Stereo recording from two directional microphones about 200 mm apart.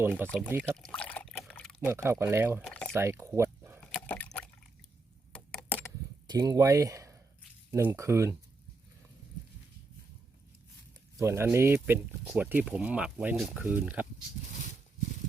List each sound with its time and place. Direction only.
0.0 s speech: 10° right (ahead or behind)
0.3 s speech: 5° left (ahead or behind)
0.6 s pour: 5° left (ahead or behind)
1.9 s speech: 10° right (ahead or behind)
2.6 s a sound: 5° left (ahead or behind)
2.9 s a sound: 15° right (ahead or behind)
4.0 s liquid: 10° left (ahead or behind)
5.3 s a sound: 5° left (ahead or behind)
6.2 s speech: 20° right (ahead or behind)
11.2 s speech: 15° right (ahead or behind)